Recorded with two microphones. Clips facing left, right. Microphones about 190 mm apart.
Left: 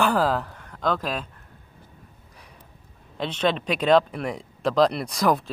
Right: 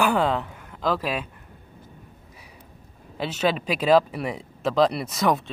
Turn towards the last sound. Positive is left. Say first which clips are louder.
# left 1 dB
turn(degrees=0)  # may be behind; listen again after turning